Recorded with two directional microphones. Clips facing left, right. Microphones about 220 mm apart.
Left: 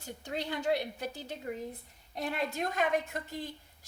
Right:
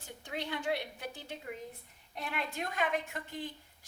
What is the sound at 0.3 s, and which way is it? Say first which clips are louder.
A woman's voice: left 4 dB; 40° left (ahead or behind).